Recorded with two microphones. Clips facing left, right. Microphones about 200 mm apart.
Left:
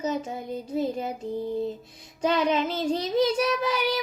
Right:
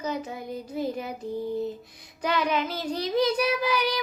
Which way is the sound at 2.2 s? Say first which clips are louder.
Left 3 dB; 25° left (ahead or behind).